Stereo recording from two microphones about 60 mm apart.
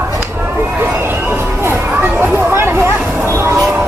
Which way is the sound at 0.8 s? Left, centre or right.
Right.